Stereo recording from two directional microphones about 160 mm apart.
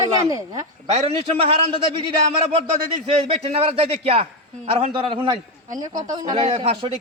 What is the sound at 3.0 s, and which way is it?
Speech, 40° right (ahead or behind).